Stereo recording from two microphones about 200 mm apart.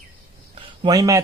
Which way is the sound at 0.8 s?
20° right (ahead or behind).